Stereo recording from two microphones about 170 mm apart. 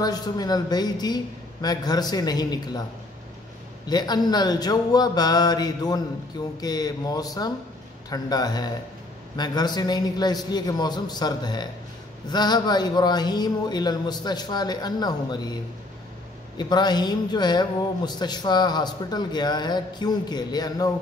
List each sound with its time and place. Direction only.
0.0 s speech: 25° left (ahead or behind)
3.9 s speech: 25° left (ahead or behind)
16.5 s speech: 25° left (ahead or behind)